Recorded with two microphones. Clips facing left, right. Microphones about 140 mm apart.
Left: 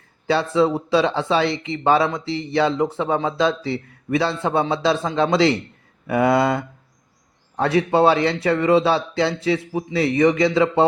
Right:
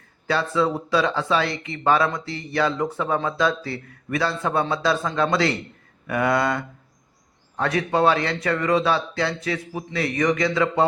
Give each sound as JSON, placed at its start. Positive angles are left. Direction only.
{"t": 0.3, "sound": "speech", "side_deg": 25}